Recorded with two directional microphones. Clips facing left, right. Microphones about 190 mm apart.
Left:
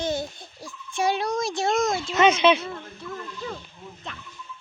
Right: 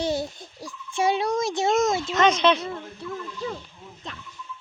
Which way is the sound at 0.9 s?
25° right (ahead or behind).